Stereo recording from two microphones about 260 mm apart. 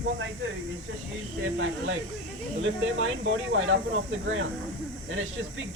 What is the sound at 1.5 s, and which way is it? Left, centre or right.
Speech, right.